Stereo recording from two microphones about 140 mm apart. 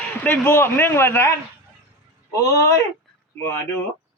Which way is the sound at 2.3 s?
25° left (ahead or behind).